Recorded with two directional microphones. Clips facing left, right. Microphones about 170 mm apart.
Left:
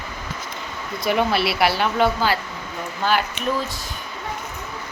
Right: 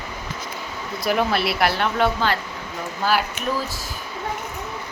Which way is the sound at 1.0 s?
Centre (ahead or behind).